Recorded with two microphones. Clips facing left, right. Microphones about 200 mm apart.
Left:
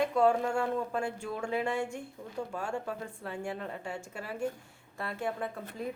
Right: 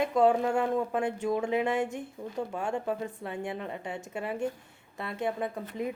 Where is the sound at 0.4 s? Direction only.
20° right (ahead or behind).